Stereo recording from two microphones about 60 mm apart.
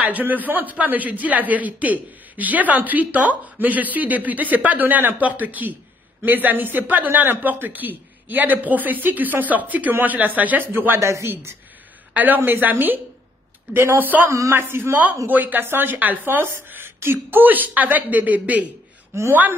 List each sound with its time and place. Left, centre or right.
0.0 s a man's voice: right
11.0 s speech: right
12.1 s a man's voice: right
19.1 s a woman's voice: right